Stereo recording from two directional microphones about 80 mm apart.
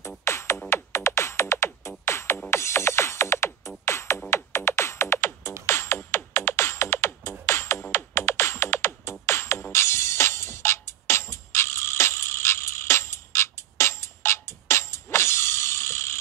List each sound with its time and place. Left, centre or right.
0.2 s music: left